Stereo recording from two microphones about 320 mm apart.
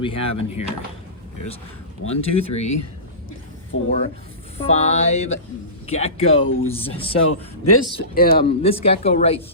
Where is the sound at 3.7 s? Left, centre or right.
Left.